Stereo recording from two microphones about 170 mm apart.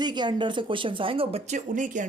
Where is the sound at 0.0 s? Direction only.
25° right (ahead or behind).